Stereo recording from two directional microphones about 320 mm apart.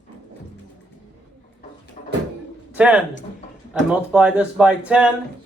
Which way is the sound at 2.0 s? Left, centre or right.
Left.